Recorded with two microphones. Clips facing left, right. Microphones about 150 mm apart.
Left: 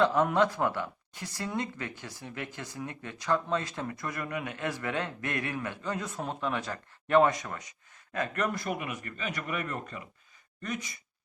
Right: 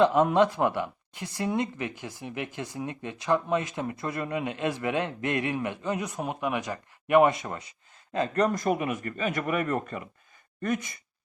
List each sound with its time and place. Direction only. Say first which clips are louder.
0.0 s speech: right 4 dB; 20° right (ahead or behind); by 10.9 s 50° right (ahead or behind)